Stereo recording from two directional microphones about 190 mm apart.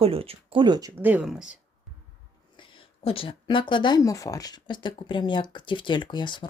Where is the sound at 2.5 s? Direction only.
25° left (ahead or behind).